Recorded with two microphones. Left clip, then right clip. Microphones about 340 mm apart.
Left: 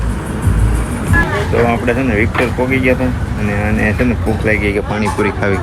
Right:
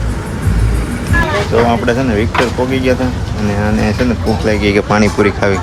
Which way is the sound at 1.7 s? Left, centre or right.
Centre.